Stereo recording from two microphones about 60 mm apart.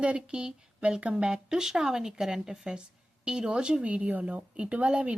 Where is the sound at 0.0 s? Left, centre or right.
Centre.